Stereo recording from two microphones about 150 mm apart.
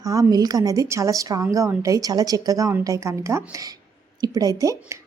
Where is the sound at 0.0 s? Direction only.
25° right (ahead or behind).